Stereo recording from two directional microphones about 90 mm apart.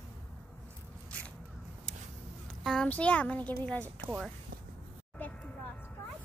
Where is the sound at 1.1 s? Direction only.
15° left (ahead or behind).